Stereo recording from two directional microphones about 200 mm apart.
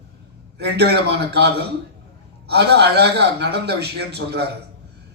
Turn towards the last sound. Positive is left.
turn(degrees=-55)  # may be behind; listen again after turning